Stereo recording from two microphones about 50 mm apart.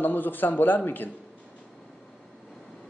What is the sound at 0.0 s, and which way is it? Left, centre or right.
Speech, left.